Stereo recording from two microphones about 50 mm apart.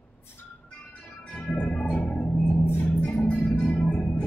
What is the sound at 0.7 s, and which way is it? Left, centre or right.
Music, left.